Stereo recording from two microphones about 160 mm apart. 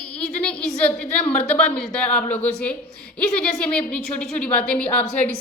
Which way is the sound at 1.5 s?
5° left (ahead or behind).